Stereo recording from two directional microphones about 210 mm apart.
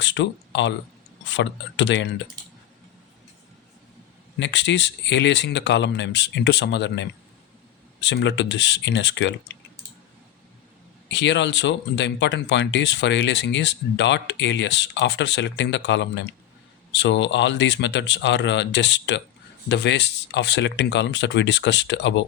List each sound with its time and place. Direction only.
0.0 s speech: 60° left (ahead or behind)
4.4 s speech: 60° left (ahead or behind)
11.1 s speech: 60° left (ahead or behind)